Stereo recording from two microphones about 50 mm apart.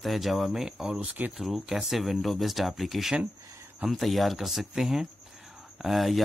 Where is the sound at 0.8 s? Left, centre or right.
Right.